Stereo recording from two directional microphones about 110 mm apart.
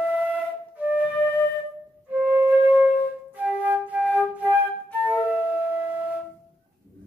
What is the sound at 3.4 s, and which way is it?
Flute, 15° right (ahead or behind).